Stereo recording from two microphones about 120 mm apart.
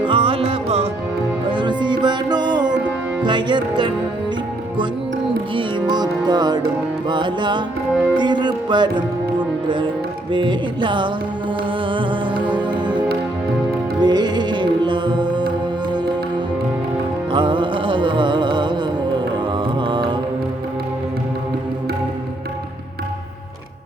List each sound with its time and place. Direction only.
0.1 s music: 50° right (ahead or behind)
1.5 s music: 40° right (ahead or behind)
5.5 s music: 40° right (ahead or behind)
7.9 s music: 10° right (ahead or behind)
8.2 s music: 40° right (ahead or behind)
17.3 s music: 40° right (ahead or behind)